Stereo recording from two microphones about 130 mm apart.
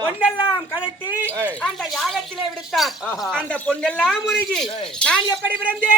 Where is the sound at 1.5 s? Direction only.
5° left (ahead or behind).